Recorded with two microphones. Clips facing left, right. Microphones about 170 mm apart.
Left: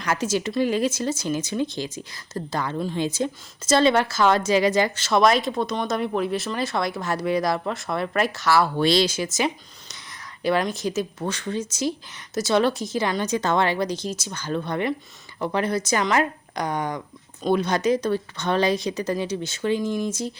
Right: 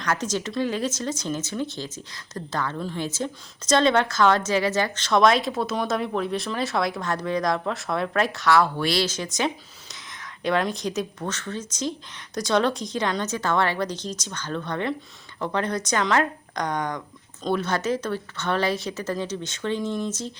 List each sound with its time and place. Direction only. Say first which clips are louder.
0.0 s speech: left 2 dB; 10° left (ahead or behind)
8.8 s speech: left 5 dB; 20° left (ahead or behind)
9.0 s speech: left 2 dB; 5° left (ahead or behind)
13.3 s speech: left 4 dB; 20° left (ahead or behind)